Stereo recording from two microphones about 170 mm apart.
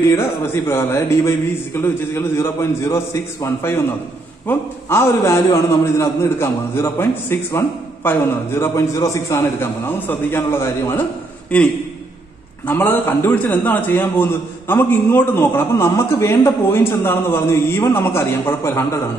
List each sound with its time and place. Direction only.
0.1 s a man's voice: 15° left (ahead or behind)
12.6 s a man's voice: 10° left (ahead or behind)